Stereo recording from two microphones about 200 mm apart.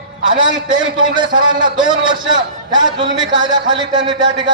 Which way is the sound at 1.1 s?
20° right (ahead or behind).